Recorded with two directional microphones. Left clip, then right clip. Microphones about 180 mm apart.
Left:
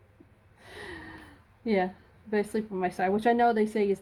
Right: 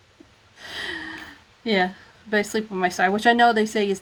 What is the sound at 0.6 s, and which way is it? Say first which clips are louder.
Gasp: right 12 dB; 30° right (ahead or behind).